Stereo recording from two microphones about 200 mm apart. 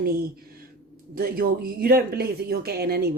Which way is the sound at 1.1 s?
50° right (ahead or behind).